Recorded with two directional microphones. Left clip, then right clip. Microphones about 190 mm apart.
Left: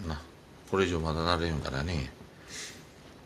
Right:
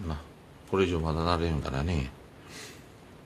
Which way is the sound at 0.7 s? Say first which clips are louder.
Right 1 dB; 10° right (ahead or behind).